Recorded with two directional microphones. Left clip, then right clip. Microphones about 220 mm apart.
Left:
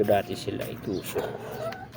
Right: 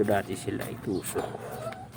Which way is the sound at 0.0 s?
20° right (ahead or behind).